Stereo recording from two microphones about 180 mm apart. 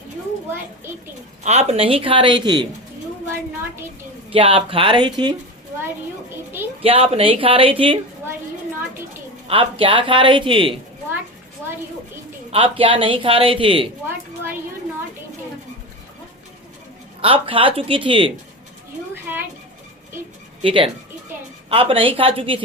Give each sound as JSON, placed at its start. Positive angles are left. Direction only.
{"t": 1.5, "sound": "a man's voice", "side_deg": -35}
{"t": 4.3, "sound": "a man's voice", "side_deg": -30}
{"t": 6.8, "sound": "speech", "side_deg": -30}
{"t": 9.5, "sound": "a man's voice", "side_deg": -30}
{"t": 12.5, "sound": "a man's voice", "side_deg": -30}
{"t": 17.2, "sound": "a man's voice", "side_deg": -30}
{"t": 19.3, "sound": "a sound", "side_deg": -10}
{"t": 20.6, "sound": "speech", "side_deg": -30}